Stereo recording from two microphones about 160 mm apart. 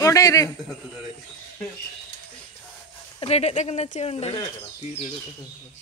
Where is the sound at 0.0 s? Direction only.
20° left (ahead or behind).